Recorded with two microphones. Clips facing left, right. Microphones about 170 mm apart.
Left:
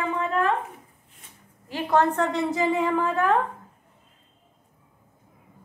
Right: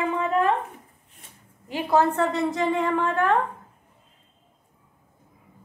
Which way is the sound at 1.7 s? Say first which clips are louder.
Right 1 dB; 10° right (ahead or behind).